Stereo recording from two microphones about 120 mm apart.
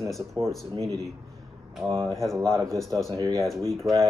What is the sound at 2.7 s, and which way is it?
Speech, centre (ahead or behind).